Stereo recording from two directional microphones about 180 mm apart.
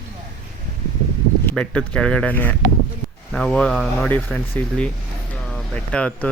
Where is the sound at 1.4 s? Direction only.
5° left (ahead or behind).